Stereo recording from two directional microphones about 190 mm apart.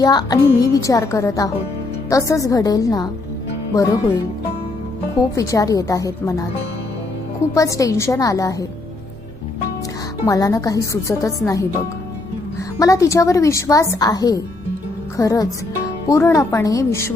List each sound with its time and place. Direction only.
0.0 s a woman's voice: 20° left (ahead or behind)
5.3 s a woman's voice: 15° left (ahead or behind)
7.5 s a woman's voice: 15° left (ahead or behind)
10.2 s a woman's voice: 20° left (ahead or behind)
12.8 s a woman's voice: 15° left (ahead or behind)